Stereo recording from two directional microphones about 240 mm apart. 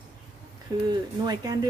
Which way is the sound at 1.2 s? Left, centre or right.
Centre.